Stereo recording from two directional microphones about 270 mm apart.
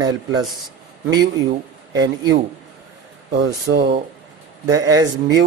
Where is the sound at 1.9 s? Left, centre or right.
Centre.